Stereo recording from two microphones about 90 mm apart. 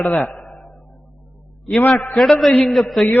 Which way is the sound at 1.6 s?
5° left (ahead or behind).